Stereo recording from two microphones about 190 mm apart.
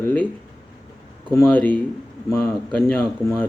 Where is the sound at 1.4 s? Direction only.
5° left (ahead or behind).